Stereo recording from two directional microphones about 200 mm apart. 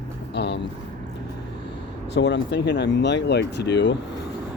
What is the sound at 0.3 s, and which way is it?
Vehicle, 60° left (ahead or behind).